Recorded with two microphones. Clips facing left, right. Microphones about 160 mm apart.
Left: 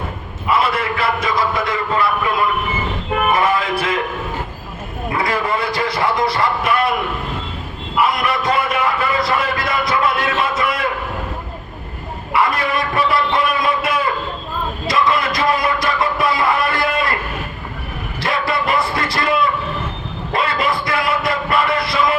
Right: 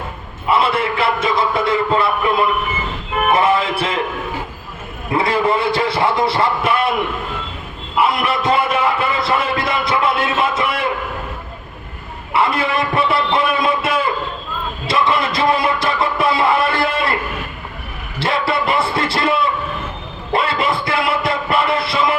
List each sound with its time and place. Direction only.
0.5 s a sound: 25° right (ahead or behind)
3.3 s music: 25° right (ahead or behind)
5.1 s a man's voice: 25° right (ahead or behind)
8.0 s a sound: 25° right (ahead or behind)
12.3 s a man's voice: 25° right (ahead or behind)
14.8 s music: 25° right (ahead or behind)
18.2 s music: 25° right (ahead or behind)
20.3 s music: 25° right (ahead or behind)